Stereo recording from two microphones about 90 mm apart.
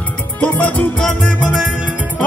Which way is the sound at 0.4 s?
15° left (ahead or behind).